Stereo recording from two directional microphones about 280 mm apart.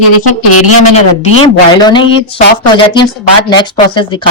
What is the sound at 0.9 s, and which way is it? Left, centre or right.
A woman's voice, left.